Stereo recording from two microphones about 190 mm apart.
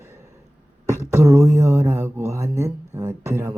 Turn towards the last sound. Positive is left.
turn(degrees=-10)  # may be behind; listen again after turning